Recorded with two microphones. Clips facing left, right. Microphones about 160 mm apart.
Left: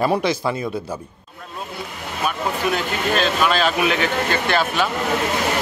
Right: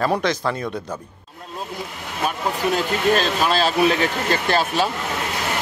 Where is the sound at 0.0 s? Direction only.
10° left (ahead or behind).